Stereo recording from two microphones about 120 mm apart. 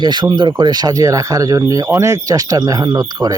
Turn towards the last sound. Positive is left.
turn(degrees=-30)  # may be behind; listen again after turning